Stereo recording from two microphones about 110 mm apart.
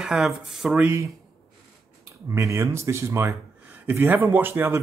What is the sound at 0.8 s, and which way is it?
Speech, 25° right (ahead or behind).